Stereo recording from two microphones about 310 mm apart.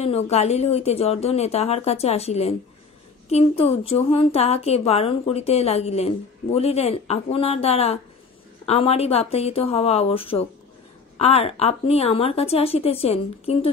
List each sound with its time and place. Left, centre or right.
0.0 s speech: centre